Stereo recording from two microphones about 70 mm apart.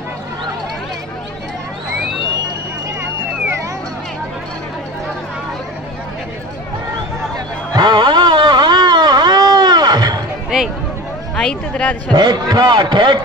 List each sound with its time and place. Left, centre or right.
7.7 s a sound: right
11.3 s speech: centre
12.1 s a man's voice: right